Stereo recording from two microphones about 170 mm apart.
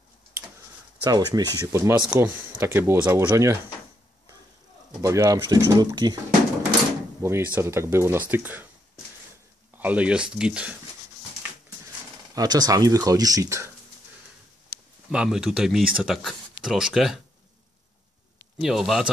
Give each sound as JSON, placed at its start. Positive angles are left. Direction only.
{"t": 1.0, "sound": "speech", "side_deg": -25}
{"t": 5.0, "sound": "speech", "side_deg": -20}
{"t": 7.2, "sound": "speech", "side_deg": -15}
{"t": 9.8, "sound": "speech", "side_deg": -10}
{"t": 12.4, "sound": "speech", "side_deg": -20}
{"t": 15.0, "sound": "speech", "side_deg": -5}
{"t": 18.6, "sound": "speech", "side_deg": 0}